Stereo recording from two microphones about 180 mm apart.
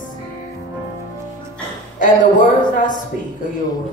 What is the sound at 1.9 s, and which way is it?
Speech, 45° left (ahead or behind).